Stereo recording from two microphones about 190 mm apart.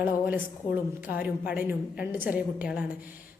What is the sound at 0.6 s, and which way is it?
Speech, 25° left (ahead or behind).